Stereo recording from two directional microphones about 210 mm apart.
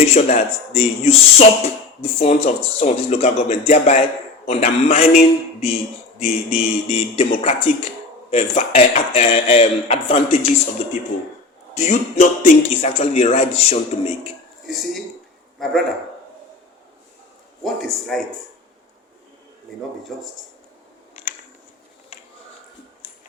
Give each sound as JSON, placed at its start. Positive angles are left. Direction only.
{"t": 0.1, "sound": "a man's voice", "side_deg": 30}
{"t": 11.7, "sound": "a man's voice", "side_deg": 35}
{"t": 15.5, "sound": "a man's voice", "side_deg": 0}
{"t": 17.6, "sound": "speech", "side_deg": 0}